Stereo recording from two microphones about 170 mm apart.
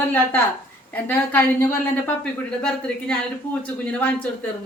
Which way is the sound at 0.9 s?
10° left (ahead or behind).